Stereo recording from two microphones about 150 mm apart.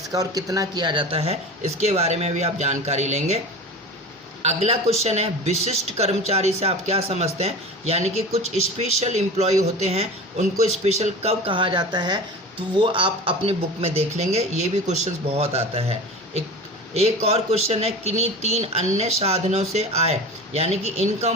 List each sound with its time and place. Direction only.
0.1 s speech: 25° right (ahead or behind); by 3.4 s 45° right (ahead or behind)
4.4 s speech: 45° right (ahead or behind)